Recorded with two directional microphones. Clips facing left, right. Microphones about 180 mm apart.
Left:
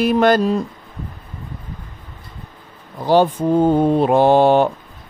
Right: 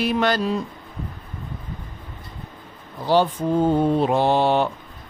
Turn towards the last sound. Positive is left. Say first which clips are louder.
# left 6 dB
turn(degrees=50)  # may be behind; listen again after turning